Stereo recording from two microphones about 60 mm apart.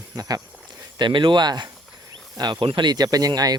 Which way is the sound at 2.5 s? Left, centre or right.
Right.